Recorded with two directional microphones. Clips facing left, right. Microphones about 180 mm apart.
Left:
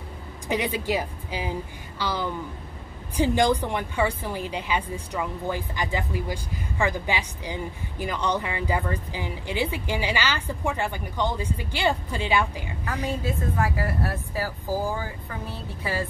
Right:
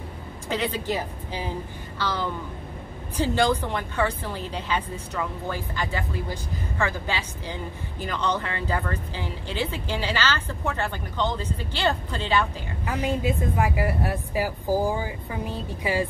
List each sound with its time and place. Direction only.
0.5 s speech: 15° left (ahead or behind)
12.8 s a woman's voice: 15° right (ahead or behind)